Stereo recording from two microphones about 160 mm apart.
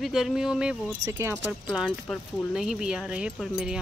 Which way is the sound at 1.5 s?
5° right (ahead or behind).